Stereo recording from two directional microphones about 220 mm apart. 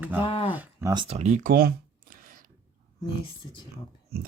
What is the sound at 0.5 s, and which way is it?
Speech, 10° right (ahead or behind).